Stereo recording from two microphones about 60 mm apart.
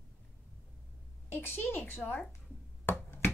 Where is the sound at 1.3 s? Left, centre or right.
Left.